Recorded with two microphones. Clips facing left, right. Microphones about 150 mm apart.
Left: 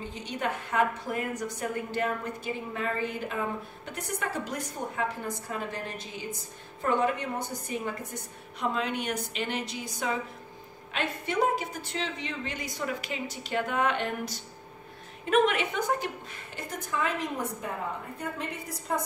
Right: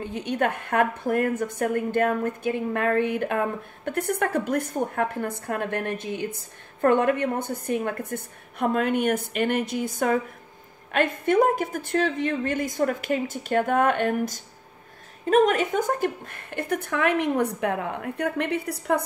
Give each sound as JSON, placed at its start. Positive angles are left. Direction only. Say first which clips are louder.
{"t": 0.0, "sound": "a woman's voice", "louder": "right 8 dB", "side_deg": -60}